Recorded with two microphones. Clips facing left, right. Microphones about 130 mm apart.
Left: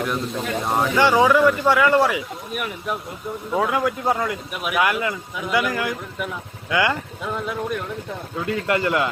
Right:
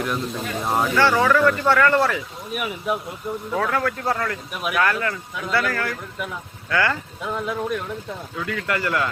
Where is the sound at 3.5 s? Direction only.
15° left (ahead or behind).